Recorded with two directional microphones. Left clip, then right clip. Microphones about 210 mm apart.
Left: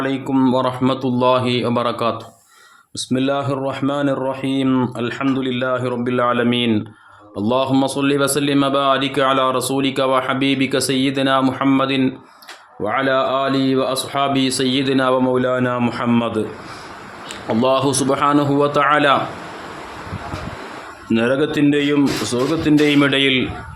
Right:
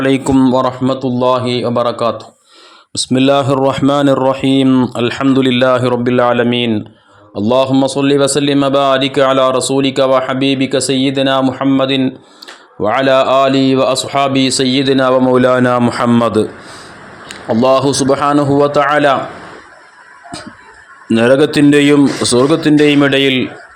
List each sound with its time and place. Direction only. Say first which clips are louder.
0.0 s speech: right 9 dB; 30° right (ahead or behind)
0.3 s a man's voice: right 5 dB; 20° right (ahead or behind)
2.9 s speech: right 9 dB; 30° right (ahead or behind)
12.8 s speech: right 7 dB; 40° right (ahead or behind)
17.5 s a man's voice: right 6 dB; 20° right (ahead or behind)
21.1 s speech: right 8 dB; 25° right (ahead or behind)